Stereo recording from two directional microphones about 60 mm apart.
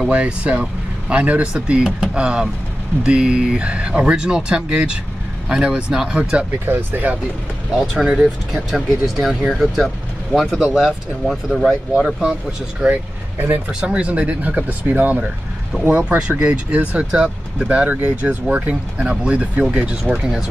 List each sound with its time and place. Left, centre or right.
0.1 s speech: right
1.5 s speech: centre
6.6 s speech: right
7.8 s speech: centre
12.8 s speech: right
13.7 s speech: centre
15.7 s speech: centre
16.1 s speech: right